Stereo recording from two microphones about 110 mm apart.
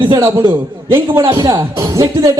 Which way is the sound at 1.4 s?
45° right (ahead or behind).